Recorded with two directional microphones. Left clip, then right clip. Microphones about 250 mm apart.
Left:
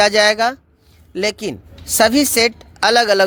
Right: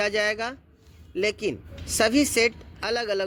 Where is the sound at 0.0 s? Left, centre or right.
Left.